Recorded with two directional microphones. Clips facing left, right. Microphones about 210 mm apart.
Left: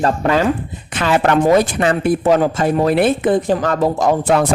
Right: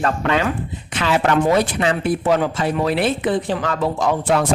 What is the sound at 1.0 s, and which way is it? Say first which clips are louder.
Speech: left 3 dB; 50° left (ahead or behind).